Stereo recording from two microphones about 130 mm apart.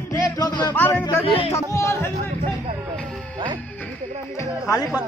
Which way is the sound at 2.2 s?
70° right (ahead or behind).